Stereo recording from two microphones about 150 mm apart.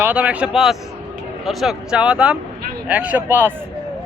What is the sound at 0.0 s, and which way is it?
Speech, 10° right (ahead or behind).